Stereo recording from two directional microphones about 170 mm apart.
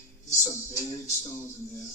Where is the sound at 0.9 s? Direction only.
15° left (ahead or behind).